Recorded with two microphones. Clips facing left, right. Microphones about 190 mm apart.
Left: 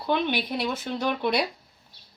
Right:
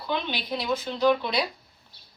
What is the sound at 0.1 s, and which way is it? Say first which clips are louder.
Speech: left 4 dB; 60° left (ahead or behind).